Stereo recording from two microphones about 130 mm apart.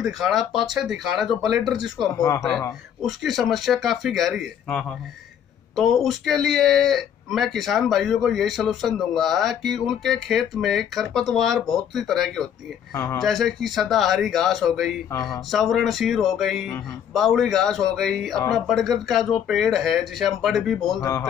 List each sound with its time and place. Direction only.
0.0 s speech: centre (ahead or behind)
12.9 s speech: 20° left (ahead or behind)
13.2 s speech: centre (ahead or behind)
21.0 s speech: 25° left (ahead or behind)